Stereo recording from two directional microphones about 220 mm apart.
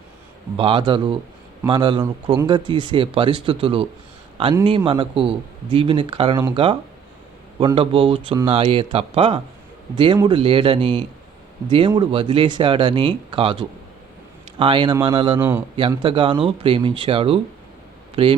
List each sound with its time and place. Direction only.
0.5 s a man's voice: 25° right (ahead or behind)
15.4 s a man's voice: 10° right (ahead or behind)
15.9 s a man's voice: 20° right (ahead or behind)